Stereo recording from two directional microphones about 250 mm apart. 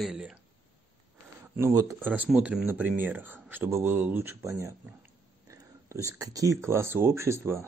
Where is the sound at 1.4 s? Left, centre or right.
Centre.